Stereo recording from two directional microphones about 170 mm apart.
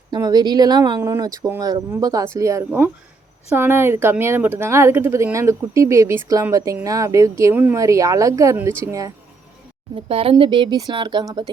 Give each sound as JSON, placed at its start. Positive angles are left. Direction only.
{"t": 0.1, "sound": "speech", "side_deg": -20}
{"t": 9.9, "sound": "speech", "side_deg": -35}